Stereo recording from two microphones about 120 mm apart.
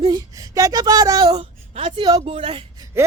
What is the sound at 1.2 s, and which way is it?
Speech, 50° right (ahead or behind).